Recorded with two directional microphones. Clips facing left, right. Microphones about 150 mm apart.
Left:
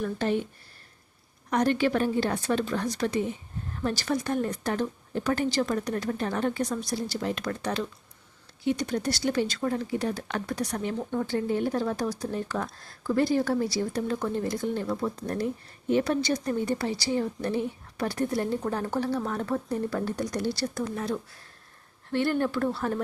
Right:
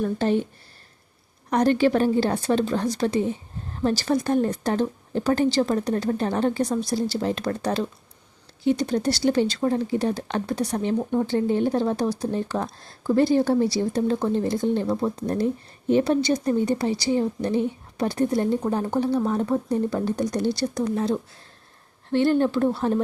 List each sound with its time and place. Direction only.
0.0 s speech: 30° right (ahead or behind)
1.5 s a woman's voice: 35° right (ahead or behind)